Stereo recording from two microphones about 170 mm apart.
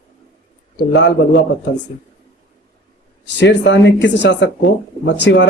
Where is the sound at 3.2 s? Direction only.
90° left.